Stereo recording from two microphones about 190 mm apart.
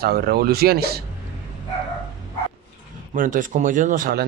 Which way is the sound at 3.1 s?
45° right (ahead or behind).